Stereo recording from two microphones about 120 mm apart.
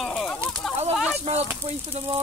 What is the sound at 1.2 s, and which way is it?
Speech, 65° right (ahead or behind).